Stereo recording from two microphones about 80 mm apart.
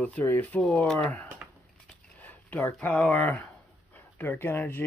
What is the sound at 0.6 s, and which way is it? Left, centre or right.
Speech, centre.